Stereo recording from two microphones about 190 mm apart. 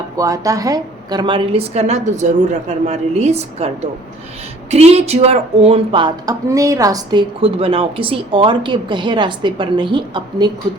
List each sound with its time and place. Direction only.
0.2 s a woman's voice: 15° right (ahead or behind); by 3.7 s 35° right (ahead or behind)
4.7 s speech: 35° right (ahead or behind)